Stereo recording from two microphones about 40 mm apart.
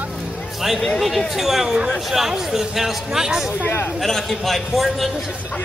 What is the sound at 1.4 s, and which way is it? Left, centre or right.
A man's voice, centre.